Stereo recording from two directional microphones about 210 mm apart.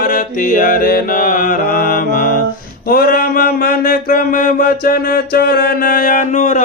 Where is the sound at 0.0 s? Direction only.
40° left (ahead or behind).